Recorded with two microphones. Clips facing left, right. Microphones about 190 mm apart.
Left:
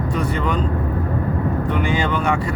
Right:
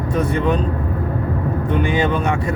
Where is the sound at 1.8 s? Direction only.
20° right (ahead or behind).